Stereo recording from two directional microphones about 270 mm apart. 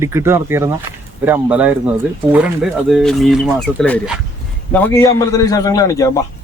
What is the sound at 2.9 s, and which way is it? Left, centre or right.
A man's voice, centre.